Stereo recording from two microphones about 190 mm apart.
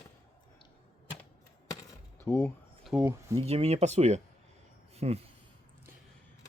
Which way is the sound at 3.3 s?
35° right (ahead or behind).